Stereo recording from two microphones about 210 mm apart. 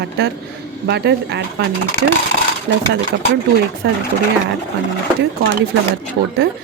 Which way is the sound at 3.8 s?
55° right (ahead or behind).